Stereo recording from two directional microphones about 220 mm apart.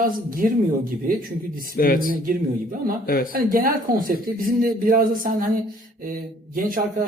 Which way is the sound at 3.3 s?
40° right (ahead or behind).